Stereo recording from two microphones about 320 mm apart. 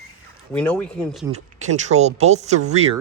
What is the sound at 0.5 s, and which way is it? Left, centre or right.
Speech, centre.